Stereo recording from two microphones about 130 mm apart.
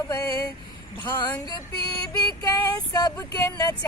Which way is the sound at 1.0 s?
35° left (ahead or behind).